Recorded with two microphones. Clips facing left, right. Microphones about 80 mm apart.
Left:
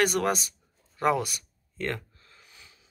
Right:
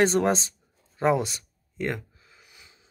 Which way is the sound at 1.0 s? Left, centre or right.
Right.